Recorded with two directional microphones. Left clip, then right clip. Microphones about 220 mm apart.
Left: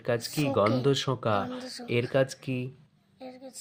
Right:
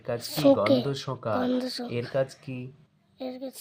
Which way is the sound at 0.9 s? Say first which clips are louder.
Left 4 dB; 30° left (ahead or behind).